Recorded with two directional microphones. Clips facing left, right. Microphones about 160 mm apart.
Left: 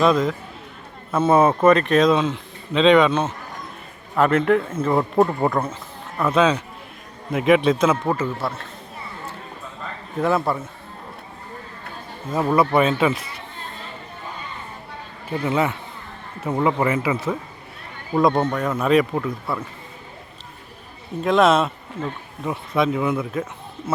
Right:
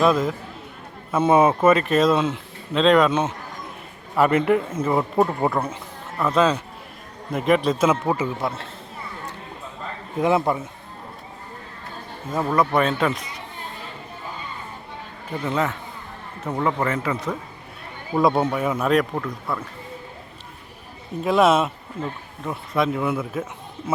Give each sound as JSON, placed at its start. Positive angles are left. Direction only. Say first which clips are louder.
{"t": 0.0, "sound": "speech", "louder": "left 1 dB", "side_deg": -5}
{"t": 7.9, "sound": "speech", "louder": "even", "side_deg": -10}
{"t": 10.2, "sound": "speech", "louder": "right 1 dB", "side_deg": -15}
{"t": 12.4, "sound": "speech", "louder": "left 2 dB", "side_deg": 10}
{"t": 15.3, "sound": "speech", "louder": "left 3 dB", "side_deg": 5}
{"t": 18.1, "sound": "speech", "louder": "left 1 dB", "side_deg": -5}
{"t": 21.2, "sound": "speech", "louder": "left 1 dB", "side_deg": -5}